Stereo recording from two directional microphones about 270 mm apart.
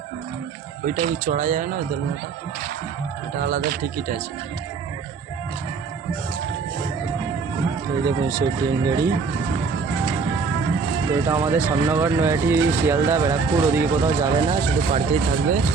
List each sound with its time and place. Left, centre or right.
0.9 s speech: right
3.3 s speech: right
8.0 s speech: centre
11.3 s speech: centre